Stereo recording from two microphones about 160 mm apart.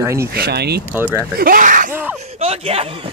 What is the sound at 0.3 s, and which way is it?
Speech, 85° right.